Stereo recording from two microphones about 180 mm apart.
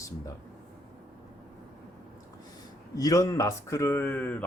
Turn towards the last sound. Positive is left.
turn(degrees=10)  # may be behind; listen again after turning